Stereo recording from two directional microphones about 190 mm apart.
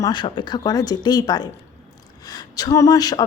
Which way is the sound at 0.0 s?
25° left (ahead or behind).